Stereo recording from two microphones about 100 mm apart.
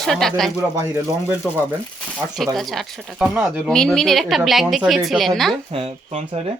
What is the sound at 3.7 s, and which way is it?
Speech, 5° left (ahead or behind).